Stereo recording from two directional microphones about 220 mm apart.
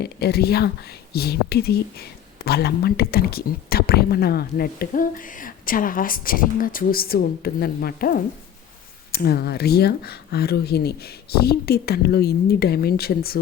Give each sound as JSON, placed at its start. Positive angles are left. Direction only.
{"t": 0.0, "sound": "speech", "side_deg": 45}